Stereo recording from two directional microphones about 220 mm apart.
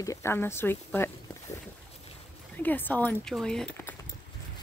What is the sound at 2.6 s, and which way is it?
Speech, 10° left (ahead or behind).